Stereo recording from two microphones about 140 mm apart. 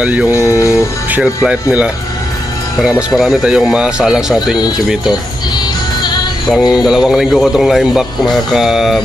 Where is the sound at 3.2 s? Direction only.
5° right (ahead or behind).